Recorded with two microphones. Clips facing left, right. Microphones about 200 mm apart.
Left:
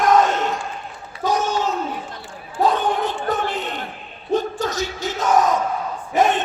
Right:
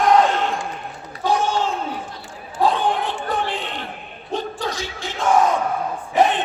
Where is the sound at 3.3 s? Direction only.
45° left (ahead or behind).